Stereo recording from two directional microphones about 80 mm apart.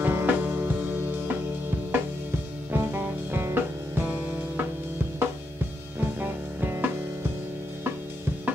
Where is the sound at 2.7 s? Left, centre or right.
Right.